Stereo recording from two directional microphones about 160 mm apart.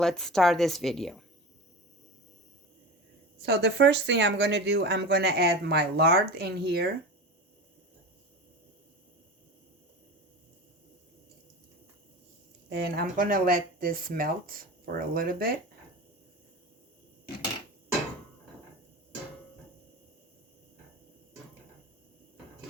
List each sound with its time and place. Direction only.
0.0 s a woman's voice: 5° left (ahead or behind)
3.4 s speech: 90° right
12.6 s speech: 85° right; by 15.5 s 65° right (ahead or behind)